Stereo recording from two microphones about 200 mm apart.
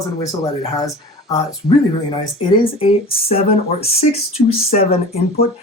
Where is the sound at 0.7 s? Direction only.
15° left (ahead or behind).